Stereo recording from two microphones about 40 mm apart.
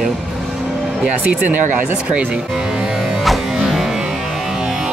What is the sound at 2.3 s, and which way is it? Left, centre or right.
Speech, right.